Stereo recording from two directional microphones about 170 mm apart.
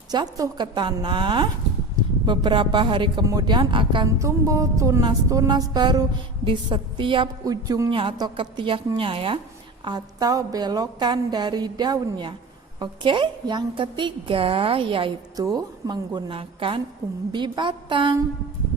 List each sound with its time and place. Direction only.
0.1 s a woman's voice: 20° right (ahead or behind)